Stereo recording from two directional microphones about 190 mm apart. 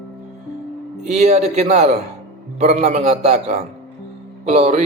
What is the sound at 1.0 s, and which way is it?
A man's voice, 35° right (ahead or behind).